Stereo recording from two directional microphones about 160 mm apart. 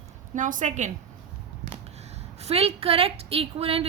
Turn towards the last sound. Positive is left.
turn(degrees=-35)  # may be behind; listen again after turning